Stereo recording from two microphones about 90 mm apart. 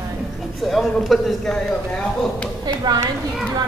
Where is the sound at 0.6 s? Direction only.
Centre (ahead or behind).